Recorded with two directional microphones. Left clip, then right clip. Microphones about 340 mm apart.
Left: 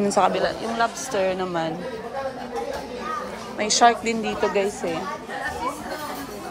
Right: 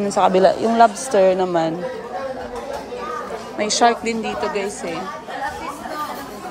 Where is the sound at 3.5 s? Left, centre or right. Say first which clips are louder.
Right 1 dB; centre.